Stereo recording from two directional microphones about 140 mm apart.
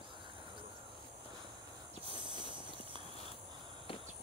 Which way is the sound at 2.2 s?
35° right (ahead or behind).